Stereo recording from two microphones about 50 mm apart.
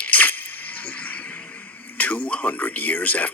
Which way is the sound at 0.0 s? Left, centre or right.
Left.